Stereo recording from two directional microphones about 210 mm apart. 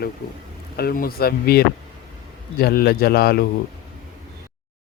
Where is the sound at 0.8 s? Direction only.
45° left (ahead or behind).